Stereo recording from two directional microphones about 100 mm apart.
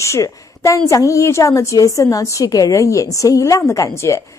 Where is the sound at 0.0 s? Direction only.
30° left (ahead or behind).